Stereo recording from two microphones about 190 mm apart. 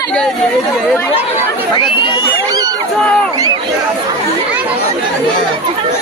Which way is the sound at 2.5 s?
20° right (ahead or behind).